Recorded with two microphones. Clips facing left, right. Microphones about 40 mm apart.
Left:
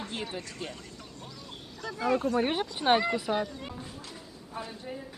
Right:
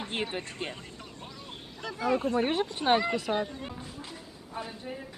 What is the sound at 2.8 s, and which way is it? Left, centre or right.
Speech, right.